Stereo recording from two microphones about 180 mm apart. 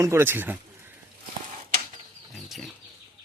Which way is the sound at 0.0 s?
15° right (ahead or behind).